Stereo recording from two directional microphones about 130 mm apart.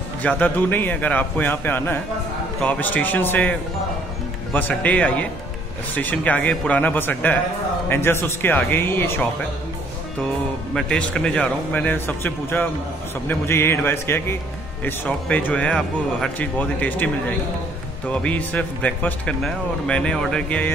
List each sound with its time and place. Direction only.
0.2 s speech: 15° left (ahead or behind)
4.6 s speech: 10° left (ahead or behind)
10.7 s speech: 5° left (ahead or behind)